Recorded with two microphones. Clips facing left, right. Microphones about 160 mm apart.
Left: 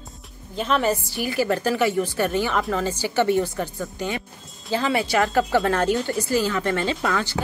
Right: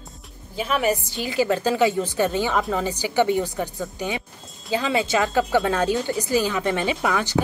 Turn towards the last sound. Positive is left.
turn(degrees=-20)  # may be behind; listen again after turning